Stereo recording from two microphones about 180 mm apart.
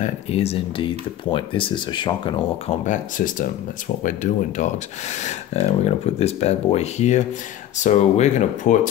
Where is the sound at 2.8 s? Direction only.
45° left (ahead or behind).